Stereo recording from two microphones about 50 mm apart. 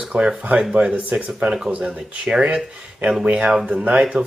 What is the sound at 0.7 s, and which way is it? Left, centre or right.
Speech, right.